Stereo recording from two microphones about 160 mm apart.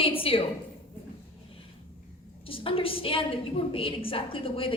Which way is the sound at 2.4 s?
35° left (ahead or behind).